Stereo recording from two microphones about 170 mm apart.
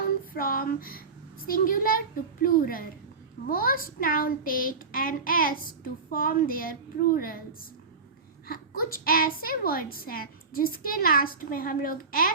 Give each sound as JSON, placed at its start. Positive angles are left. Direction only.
{"t": 0.3, "sound": "a sound", "side_deg": 55}
{"t": 1.5, "sound": "a child's voice", "side_deg": 55}
{"t": 8.4, "sound": "a child's voice", "side_deg": 55}